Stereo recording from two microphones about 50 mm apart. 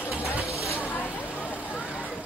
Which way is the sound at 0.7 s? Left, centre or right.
Left.